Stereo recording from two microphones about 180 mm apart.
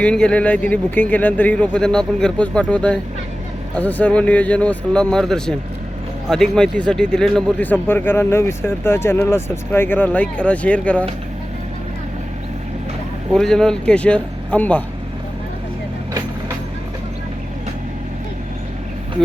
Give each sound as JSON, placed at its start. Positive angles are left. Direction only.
{"t": 0.0, "sound": "speech", "side_deg": 5}
{"t": 13.3, "sound": "speech", "side_deg": 5}